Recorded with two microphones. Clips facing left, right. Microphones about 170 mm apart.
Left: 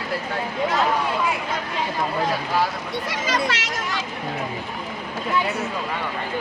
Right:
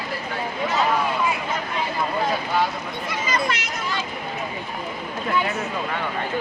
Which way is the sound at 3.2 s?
90° left.